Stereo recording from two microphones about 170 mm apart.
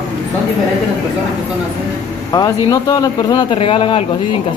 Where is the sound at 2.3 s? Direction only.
20° left (ahead or behind).